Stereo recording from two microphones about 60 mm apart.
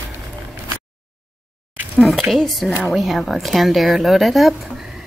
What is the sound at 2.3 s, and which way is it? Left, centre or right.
Speech, centre.